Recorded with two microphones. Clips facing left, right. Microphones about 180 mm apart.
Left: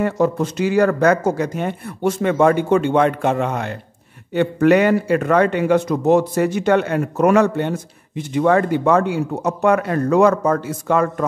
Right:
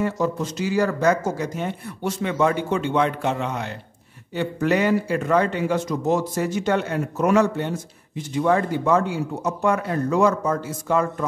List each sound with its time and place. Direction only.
0.0 s a man's voice: 60° left (ahead or behind)